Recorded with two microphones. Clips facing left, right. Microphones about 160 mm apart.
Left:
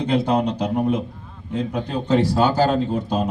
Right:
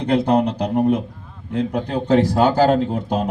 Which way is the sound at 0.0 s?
55° right (ahead or behind).